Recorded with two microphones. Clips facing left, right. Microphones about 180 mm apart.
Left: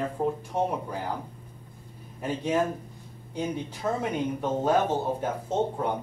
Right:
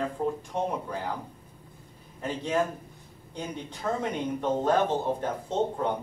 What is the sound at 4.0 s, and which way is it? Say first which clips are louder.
Speech: left 1 dB; 10° left (ahead or behind).